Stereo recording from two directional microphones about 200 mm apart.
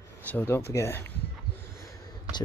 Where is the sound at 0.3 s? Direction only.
10° left (ahead or behind).